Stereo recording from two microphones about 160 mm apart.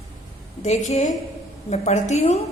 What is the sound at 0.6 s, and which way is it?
A woman's voice, 50° left (ahead or behind).